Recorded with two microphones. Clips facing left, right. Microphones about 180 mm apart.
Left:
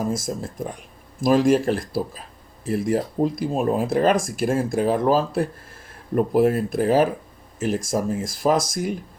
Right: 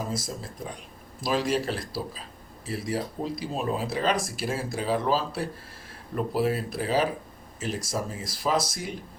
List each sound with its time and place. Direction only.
0.1 s speech: 50° left (ahead or behind)